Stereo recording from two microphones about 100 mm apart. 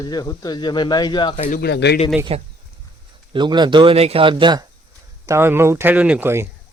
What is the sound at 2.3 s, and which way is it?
Speech, 75° right (ahead or behind).